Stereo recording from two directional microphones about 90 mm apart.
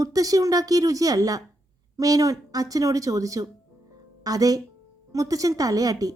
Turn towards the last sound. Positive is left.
turn(degrees=-45)  # may be behind; listen again after turning